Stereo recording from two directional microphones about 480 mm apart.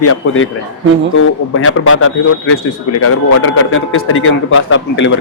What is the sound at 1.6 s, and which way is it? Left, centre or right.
Speech, left.